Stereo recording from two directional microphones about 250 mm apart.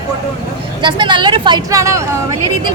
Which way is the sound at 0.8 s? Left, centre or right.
Centre.